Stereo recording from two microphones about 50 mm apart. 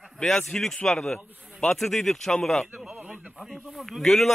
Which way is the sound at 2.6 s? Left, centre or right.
Centre.